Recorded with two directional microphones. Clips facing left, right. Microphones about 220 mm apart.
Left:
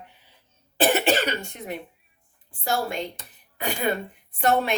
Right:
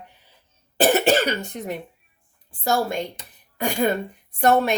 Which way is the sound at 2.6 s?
45° right (ahead or behind).